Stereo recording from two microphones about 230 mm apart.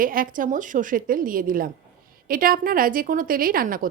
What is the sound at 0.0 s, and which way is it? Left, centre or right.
Speech, right.